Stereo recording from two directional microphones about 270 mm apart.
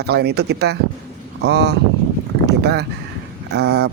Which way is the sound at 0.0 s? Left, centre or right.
Right.